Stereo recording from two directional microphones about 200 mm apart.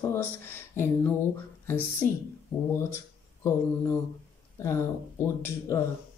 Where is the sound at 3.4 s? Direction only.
15° left (ahead or behind).